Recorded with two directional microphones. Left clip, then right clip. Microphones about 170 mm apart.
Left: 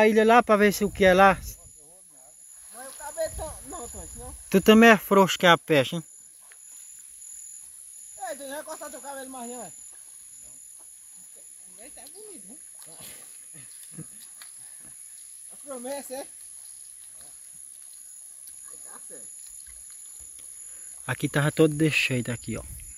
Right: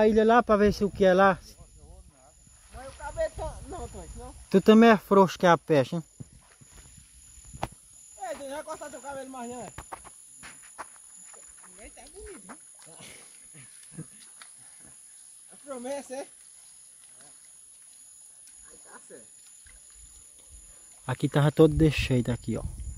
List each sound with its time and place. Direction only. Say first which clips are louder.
0.0 s speech: left 2 dB; 10° left (ahead or behind)
2.7 s snake: even; 15° right (ahead or behind)
4.5 s speech: left 2 dB; 10° left (ahead or behind)
8.2 s speech: left 1 dB; 15° right (ahead or behind)
12.8 s pig: left 2 dB; centre (ahead or behind)
15.7 s speech: even; 5° right (ahead or behind)
18.9 s a sound: right 1 dB; 20° right (ahead or behind)
21.0 s speech: left 1 dB; 10° right (ahead or behind)